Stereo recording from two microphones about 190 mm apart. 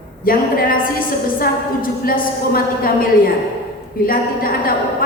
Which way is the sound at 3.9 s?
50° left (ahead or behind).